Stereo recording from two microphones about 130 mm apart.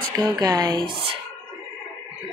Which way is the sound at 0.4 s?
30° right (ahead or behind).